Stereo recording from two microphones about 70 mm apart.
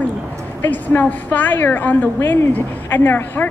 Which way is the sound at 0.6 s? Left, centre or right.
Left.